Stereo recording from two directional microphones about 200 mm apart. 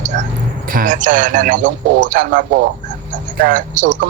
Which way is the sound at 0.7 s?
40° right (ahead or behind).